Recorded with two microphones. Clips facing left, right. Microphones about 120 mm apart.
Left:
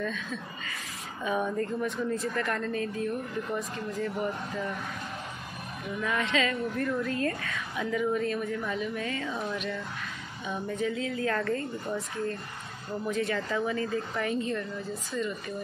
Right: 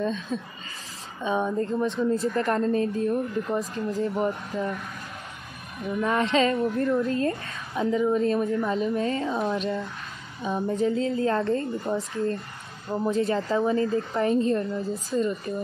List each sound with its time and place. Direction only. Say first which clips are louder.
0.0 s a woman's voice: right 6 dB; 30° right (ahead or behind)
5.9 s a woman's voice: right 6 dB; 35° right (ahead or behind)